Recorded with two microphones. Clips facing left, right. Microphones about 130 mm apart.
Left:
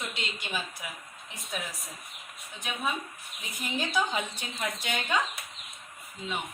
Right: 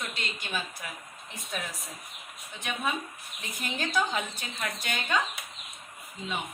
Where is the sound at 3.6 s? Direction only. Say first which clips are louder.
Even; 10° left (ahead or behind).